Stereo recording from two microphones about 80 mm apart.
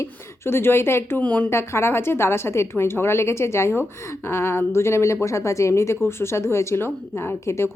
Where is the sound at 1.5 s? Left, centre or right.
Left.